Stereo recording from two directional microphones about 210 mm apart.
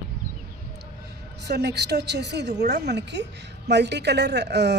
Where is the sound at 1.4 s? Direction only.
50° right (ahead or behind).